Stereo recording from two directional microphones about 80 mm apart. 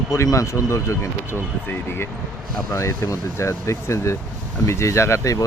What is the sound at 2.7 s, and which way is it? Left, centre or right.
Speech, left.